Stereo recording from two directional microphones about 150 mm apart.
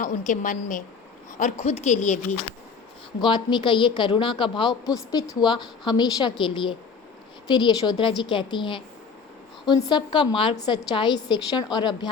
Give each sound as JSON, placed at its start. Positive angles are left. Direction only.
{"t": 0.0, "sound": "a woman's voice", "side_deg": 60}
{"t": 1.4, "sound": "a woman's voice", "side_deg": 50}
{"t": 3.2, "sound": "a woman's voice", "side_deg": 30}